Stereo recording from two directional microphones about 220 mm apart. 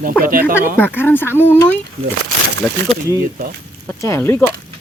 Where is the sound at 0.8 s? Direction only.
10° left (ahead or behind).